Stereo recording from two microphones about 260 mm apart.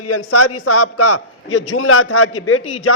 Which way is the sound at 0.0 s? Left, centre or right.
Left.